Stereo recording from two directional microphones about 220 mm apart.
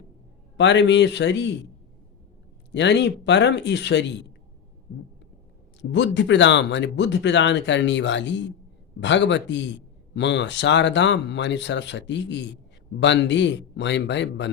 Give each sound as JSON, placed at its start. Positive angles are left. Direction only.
{"t": 0.5, "sound": "speech", "side_deg": 55}
{"t": 2.7, "sound": "speech", "side_deg": 50}
{"t": 5.8, "sound": "speech", "side_deg": 55}